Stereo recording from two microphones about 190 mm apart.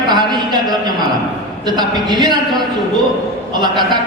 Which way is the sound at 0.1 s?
20° right (ahead or behind).